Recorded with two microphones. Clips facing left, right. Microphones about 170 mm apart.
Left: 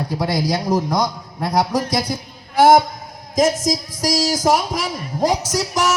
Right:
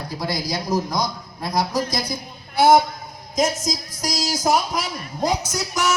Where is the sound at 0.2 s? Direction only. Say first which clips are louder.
Left 5 dB; 65° left (ahead or behind).